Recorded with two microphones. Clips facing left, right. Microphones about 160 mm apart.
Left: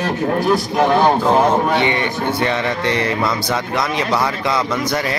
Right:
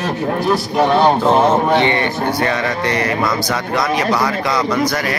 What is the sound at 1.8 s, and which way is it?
A man's voice, 15° left (ahead or behind).